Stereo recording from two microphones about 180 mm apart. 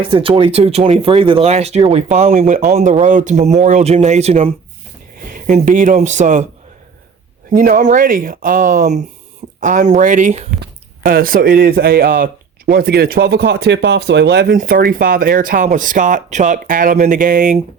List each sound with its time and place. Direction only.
0.0 s speech: 30° right (ahead or behind)
7.5 s speech: 45° right (ahead or behind)
10.6 s speech: 55° right (ahead or behind)